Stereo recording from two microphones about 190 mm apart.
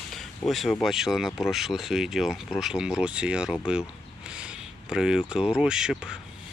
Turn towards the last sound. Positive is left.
turn(degrees=-5)  # may be behind; listen again after turning